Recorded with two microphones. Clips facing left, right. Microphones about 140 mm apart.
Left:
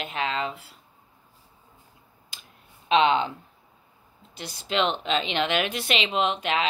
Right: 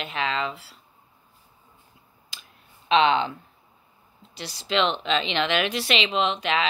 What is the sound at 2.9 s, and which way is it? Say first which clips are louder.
Speech: right 1 dB; 45° left (ahead or behind).